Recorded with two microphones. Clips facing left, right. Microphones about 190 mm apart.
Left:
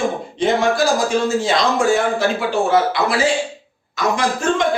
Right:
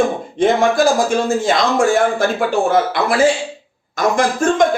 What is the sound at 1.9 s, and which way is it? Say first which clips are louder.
A man's voice: right 2 dB; 50° right (ahead or behind).